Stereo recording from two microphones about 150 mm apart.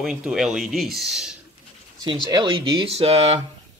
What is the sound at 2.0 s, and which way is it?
Speech, 30° right (ahead or behind).